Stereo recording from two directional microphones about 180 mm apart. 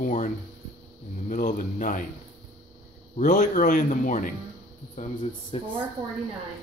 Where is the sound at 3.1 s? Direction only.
45° left (ahead or behind).